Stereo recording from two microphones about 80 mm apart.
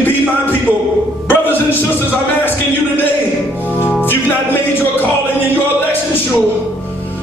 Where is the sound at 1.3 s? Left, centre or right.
Left.